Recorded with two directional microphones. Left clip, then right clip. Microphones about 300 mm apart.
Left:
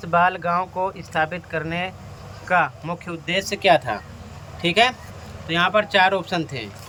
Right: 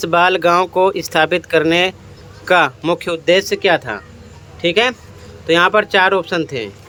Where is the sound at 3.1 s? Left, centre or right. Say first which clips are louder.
Right 9 dB; centre.